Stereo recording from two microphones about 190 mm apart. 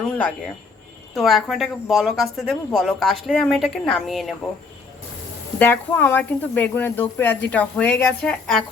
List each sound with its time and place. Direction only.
1.1 s a woman's voice: centre (ahead or behind)
5.5 s speech: 10° left (ahead or behind)